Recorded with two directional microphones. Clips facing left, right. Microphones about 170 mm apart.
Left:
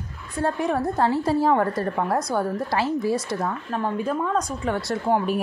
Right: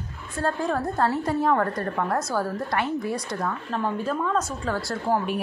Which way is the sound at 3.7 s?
10° left (ahead or behind).